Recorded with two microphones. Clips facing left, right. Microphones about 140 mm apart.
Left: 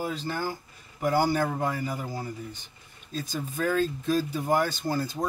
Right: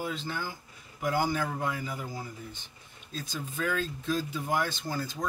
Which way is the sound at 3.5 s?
45° left (ahead or behind).